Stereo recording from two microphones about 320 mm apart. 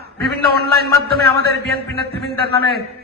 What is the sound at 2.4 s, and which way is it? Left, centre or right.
Speech, right.